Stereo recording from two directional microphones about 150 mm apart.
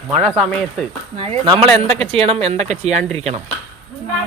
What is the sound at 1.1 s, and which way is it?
Speech, 40° right (ahead or behind).